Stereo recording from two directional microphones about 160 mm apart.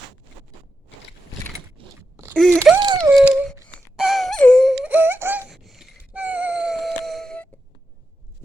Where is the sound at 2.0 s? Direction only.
15° right (ahead or behind).